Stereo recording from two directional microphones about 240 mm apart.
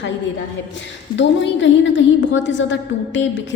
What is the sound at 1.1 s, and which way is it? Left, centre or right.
A woman's voice, left.